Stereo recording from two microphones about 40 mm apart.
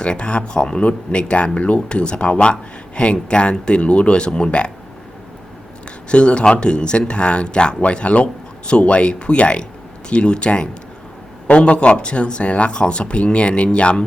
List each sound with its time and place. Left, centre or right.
0.0 s speech: left
6.1 s speech: left